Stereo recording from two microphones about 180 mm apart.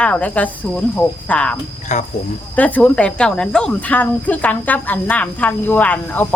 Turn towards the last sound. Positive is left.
turn(degrees=10)  # may be behind; listen again after turning